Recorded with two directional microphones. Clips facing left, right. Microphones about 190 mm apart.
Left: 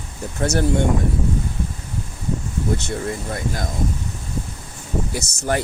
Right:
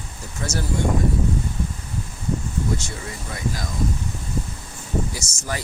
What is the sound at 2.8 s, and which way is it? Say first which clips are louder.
Speech: left 8 dB; 55° left (ahead or behind).